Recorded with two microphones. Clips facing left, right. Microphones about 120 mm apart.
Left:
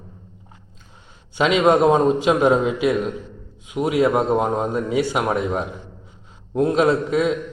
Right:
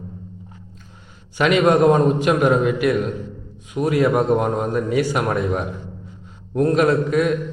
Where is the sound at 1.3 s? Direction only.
20° left (ahead or behind).